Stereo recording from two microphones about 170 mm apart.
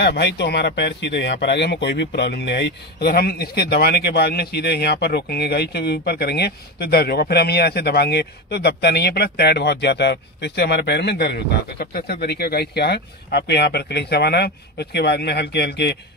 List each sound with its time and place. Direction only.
0.0 s speech: 80° left